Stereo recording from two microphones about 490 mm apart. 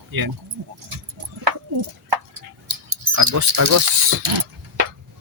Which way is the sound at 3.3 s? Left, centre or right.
Right.